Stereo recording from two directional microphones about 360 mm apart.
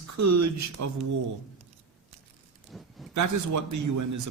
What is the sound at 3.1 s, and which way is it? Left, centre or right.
A man's voice, right.